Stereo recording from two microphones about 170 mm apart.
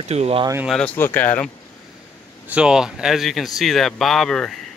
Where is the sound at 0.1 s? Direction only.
35° right (ahead or behind).